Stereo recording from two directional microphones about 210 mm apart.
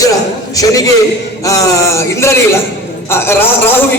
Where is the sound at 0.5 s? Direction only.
15° left (ahead or behind).